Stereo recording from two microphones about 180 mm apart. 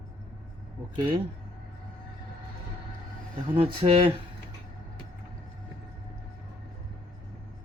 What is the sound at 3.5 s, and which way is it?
Speech, 30° right (ahead or behind).